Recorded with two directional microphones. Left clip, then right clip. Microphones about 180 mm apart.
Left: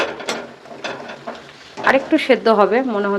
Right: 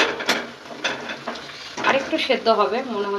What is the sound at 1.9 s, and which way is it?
A woman's voice, 55° left (ahead or behind).